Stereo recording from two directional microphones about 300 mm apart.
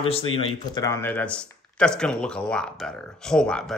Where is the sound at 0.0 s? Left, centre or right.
Centre.